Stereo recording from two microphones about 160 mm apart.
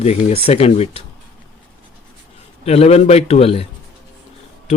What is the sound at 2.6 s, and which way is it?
Speech, 40° left (ahead or behind).